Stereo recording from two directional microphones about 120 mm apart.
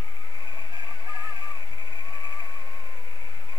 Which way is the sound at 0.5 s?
40° left (ahead or behind).